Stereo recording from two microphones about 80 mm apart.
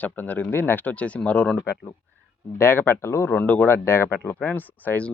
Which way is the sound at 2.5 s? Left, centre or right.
Left.